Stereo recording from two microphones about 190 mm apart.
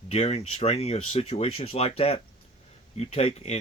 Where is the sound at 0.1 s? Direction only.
35° left (ahead or behind).